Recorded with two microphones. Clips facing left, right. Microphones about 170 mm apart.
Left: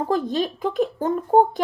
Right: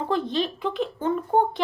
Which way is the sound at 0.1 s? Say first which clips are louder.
Left 1 dB; 45° left (ahead or behind).